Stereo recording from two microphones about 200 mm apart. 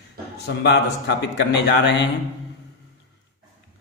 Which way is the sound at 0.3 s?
55° left (ahead or behind).